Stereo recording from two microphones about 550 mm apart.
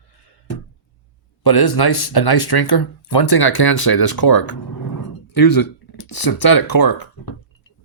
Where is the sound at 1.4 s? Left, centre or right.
Left.